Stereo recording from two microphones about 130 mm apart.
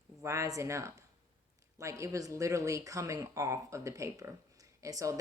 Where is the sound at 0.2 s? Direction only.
25° right (ahead or behind).